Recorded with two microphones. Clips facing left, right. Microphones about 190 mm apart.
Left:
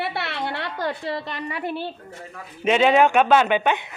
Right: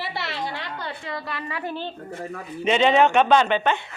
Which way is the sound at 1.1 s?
20° left (ahead or behind).